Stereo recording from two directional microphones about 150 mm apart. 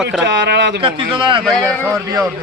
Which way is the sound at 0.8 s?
35° right (ahead or behind).